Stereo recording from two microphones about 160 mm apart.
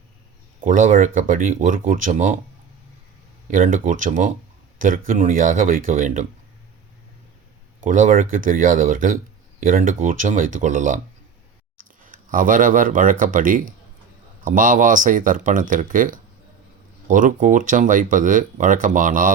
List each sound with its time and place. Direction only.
0.6 s speech: 55° right (ahead or behind)
3.5 s speech: 55° right (ahead or behind)
7.8 s speech: 55° right (ahead or behind)
12.0 s speech: 55° right (ahead or behind)